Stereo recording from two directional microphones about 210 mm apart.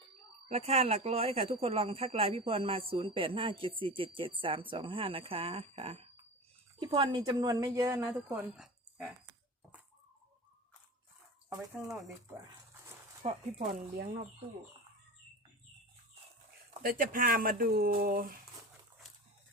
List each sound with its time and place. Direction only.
0.4 s speech: 30° right (ahead or behind); by 8.4 s 15° right (ahead or behind)
8.4 s a sound: centre (ahead or behind)
11.4 s speech: 15° right (ahead or behind)
11.9 s speech: centre (ahead or behind)
13.2 s speech: 30° right (ahead or behind)
16.8 s speech: 40° right (ahead or behind)